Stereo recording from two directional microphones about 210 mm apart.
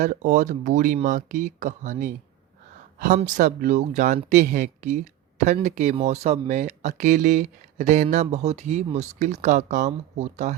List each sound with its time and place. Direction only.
0.0 s speech: 35° right (ahead or behind)